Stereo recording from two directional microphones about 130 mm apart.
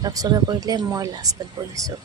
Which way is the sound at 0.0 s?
30° right (ahead or behind).